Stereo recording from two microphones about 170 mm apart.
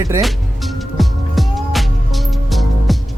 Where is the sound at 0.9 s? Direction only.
Centre (ahead or behind).